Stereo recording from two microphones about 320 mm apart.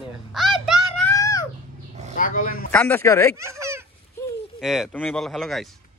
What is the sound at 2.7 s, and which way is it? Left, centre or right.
Speech, centre.